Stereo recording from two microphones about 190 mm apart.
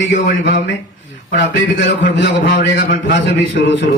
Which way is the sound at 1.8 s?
70° left (ahead or behind).